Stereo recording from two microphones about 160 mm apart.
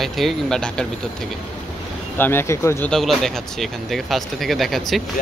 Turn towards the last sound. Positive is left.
turn(degrees=0)  # may be behind; listen again after turning